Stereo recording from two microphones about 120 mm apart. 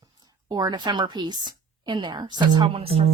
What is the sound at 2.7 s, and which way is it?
Speech, 55° right (ahead or behind).